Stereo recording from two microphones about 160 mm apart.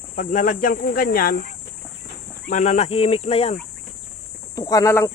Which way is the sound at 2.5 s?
50° left (ahead or behind).